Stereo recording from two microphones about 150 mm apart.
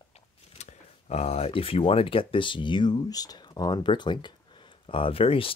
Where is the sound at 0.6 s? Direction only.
45° left (ahead or behind).